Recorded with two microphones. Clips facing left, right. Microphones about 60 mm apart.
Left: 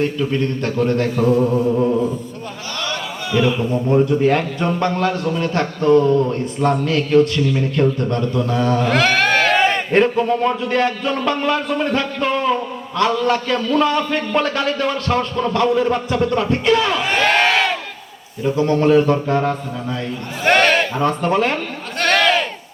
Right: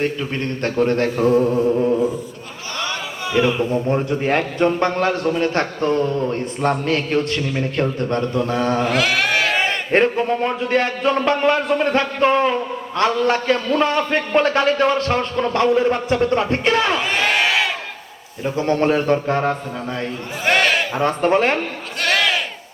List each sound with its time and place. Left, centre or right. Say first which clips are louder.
0.0 s a man's voice: left 3 dB; right
3.3 s a man's voice: even; right
8.9 s a sound: left 3 dB; centre
9.9 s a man's voice: right 2 dB; right
17.2 s crowd: left 5 dB; centre
18.5 s a man's voice: left 4 dB; right
20.4 s a sound: left 3 dB; centre
21.0 s a man's voice: right 1 dB; right
22.0 s sheep: left 3 dB; centre